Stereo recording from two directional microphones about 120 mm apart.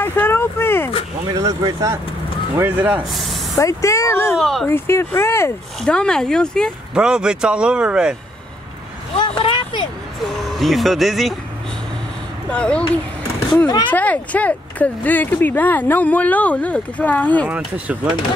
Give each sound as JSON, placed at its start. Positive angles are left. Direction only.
{"t": 0.0, "sound": "vehicle", "side_deg": 15}
{"t": 1.4, "sound": "speech", "side_deg": -35}
{"t": 2.5, "sound": "speech", "side_deg": -15}
{"t": 3.0, "sound": "speech", "side_deg": 0}
{"t": 3.5, "sound": "speech", "side_deg": 25}
{"t": 4.4, "sound": "speech", "side_deg": 0}
{"t": 4.6, "sound": "speech", "side_deg": 20}
{"t": 5.8, "sound": "speech", "side_deg": 5}
{"t": 6.9, "sound": "speech", "side_deg": -5}
{"t": 9.4, "sound": "vehicle", "side_deg": 45}
{"t": 10.2, "sound": "speech", "side_deg": 0}
{"t": 12.4, "sound": "speech", "side_deg": 10}
{"t": 13.7, "sound": "speech", "side_deg": 35}
{"t": 13.9, "sound": "speech", "side_deg": 10}